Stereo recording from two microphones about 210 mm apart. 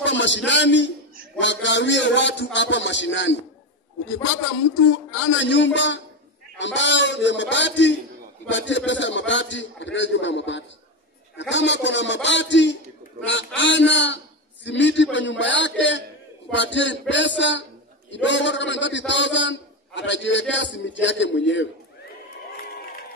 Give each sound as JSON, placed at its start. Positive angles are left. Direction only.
{"t": 0.0, "sound": "a man's voice", "side_deg": 60}
{"t": 5.3, "sound": "a man's voice", "side_deg": 60}